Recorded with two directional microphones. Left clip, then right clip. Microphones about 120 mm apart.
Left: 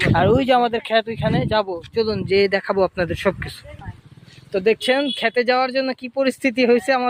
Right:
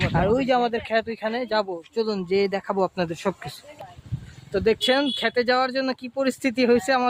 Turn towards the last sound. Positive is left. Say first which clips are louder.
# left 3 dB
turn(degrees=15)  # may be behind; listen again after turning